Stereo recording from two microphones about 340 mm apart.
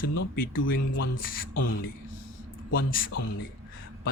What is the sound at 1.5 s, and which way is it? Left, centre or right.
Speech, left.